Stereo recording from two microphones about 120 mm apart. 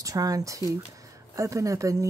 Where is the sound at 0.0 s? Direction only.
30° right (ahead or behind).